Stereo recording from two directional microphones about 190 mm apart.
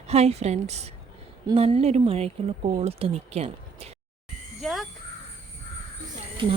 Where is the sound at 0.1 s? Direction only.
35° right (ahead or behind).